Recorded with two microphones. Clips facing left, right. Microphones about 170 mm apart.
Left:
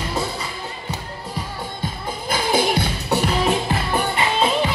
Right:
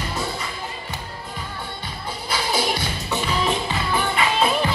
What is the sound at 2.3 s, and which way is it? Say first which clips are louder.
Music: left 4 dB; 55° left (ahead or behind).